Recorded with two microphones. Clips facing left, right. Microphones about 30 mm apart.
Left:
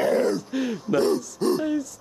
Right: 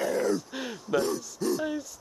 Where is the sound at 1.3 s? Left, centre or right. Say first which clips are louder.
Left 6 dB; left.